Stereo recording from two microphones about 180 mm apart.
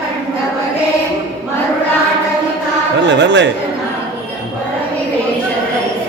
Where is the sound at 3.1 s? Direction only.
75° right (ahead or behind).